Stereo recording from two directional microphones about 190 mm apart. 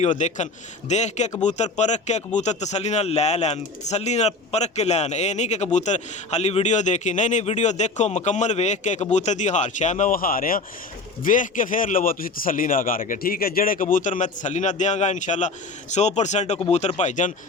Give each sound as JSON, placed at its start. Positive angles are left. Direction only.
{"t": 0.0, "sound": "a man's voice", "side_deg": 40}